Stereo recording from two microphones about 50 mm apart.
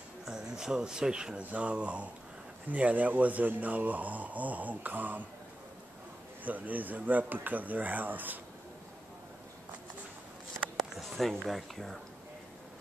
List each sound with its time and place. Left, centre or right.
0.2 s speech: centre; by 5.2 s right
6.4 s speech: right
10.8 s speech: centre